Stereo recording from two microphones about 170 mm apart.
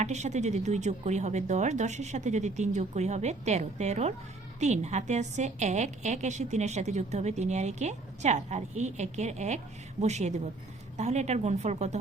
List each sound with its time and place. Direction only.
0.0 s a woman's voice: 45° right (ahead or behind)